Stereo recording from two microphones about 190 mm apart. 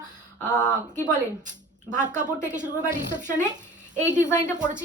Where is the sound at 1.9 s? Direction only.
40° right (ahead or behind).